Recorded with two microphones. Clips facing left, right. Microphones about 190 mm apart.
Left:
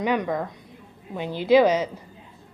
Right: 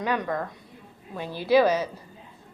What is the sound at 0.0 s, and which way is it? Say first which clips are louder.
A woman's voice: left 3 dB; 20° left (ahead or behind).